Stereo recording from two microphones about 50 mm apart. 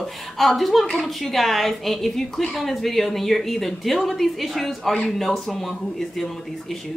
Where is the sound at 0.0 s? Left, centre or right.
Centre.